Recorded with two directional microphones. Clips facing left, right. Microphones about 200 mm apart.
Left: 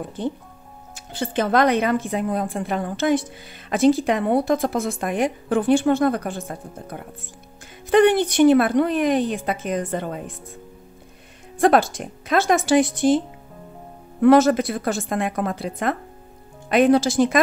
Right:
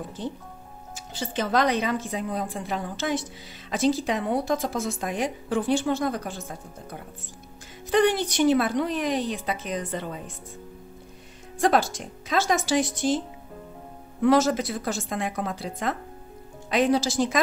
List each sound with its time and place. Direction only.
0.2 s a woman's voice: 55° left (ahead or behind)
11.6 s a woman's voice: 55° left (ahead or behind)
14.2 s a woman's voice: 60° left (ahead or behind)